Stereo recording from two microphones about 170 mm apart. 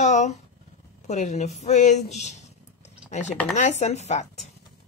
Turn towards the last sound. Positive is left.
turn(degrees=40)  # may be behind; listen again after turning